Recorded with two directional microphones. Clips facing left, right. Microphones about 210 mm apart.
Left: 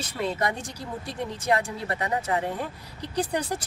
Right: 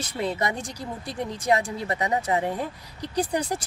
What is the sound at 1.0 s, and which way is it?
Speech, 10° right (ahead or behind).